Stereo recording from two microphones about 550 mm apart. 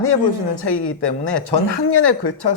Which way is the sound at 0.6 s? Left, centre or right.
Left.